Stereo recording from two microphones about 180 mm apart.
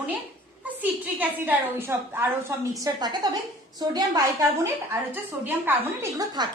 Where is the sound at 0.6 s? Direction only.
10° right (ahead or behind).